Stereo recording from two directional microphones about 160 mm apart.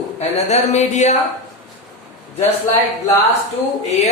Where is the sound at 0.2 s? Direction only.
45° left (ahead or behind).